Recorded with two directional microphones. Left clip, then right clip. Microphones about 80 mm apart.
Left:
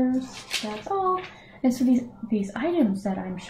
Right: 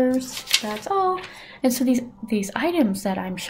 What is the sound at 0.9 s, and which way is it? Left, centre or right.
Speech, right.